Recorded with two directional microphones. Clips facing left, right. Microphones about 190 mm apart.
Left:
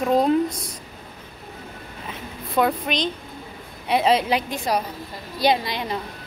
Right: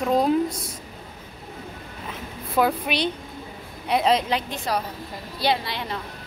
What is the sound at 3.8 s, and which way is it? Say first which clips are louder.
A woman's voice: left 2 dB; centre (ahead or behind).